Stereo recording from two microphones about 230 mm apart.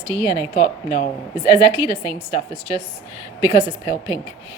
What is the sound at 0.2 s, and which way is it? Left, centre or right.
Speech, centre.